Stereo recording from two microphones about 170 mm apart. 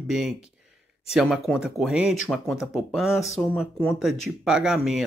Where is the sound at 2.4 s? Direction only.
15° left (ahead or behind).